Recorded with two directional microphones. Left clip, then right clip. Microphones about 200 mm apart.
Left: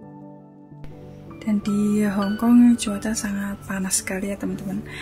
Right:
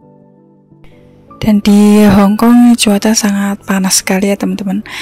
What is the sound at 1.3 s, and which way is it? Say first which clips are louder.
Speech: right 15 dB; 45° right (ahead or behind).